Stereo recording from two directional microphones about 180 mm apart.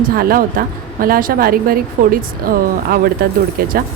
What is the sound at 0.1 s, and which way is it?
A woman's voice, 55° right (ahead or behind).